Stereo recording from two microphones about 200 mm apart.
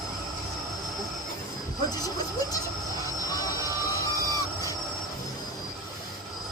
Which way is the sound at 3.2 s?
20° left (ahead or behind).